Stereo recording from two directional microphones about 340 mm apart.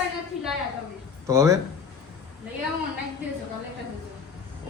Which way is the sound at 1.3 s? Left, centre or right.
Centre.